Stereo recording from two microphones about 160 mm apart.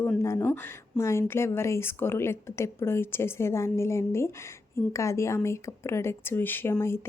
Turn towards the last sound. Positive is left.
turn(degrees=15)  # may be behind; listen again after turning